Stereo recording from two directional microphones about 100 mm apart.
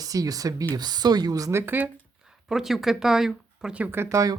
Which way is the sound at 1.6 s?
20° right (ahead or behind).